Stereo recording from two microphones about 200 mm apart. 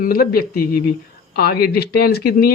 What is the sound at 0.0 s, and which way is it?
Speech, 50° left (ahead or behind).